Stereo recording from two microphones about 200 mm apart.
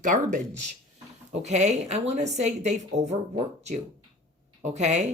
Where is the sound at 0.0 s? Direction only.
40° right (ahead or behind).